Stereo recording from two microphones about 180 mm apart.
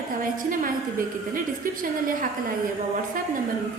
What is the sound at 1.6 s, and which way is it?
Speech, 50° right (ahead or behind).